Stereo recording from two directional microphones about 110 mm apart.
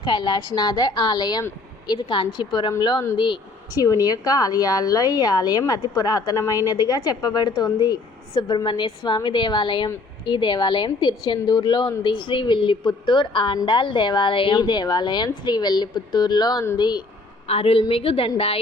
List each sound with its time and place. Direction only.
0.0 s a woman's voice: 40° left (ahead or behind)
3.8 s a woman's voice: 35° left (ahead or behind)
17.5 s a woman's voice: 60° left (ahead or behind)